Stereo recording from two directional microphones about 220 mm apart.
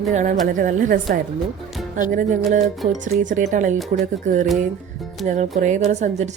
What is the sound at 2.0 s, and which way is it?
Speech, 35° right (ahead or behind).